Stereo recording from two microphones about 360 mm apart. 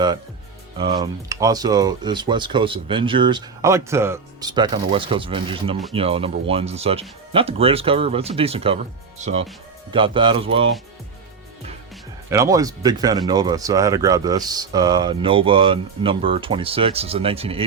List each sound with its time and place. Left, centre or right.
0.9 s speech: centre
12.3 s speech: centre